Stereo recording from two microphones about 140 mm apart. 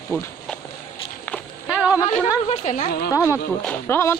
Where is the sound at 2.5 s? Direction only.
65° left (ahead or behind).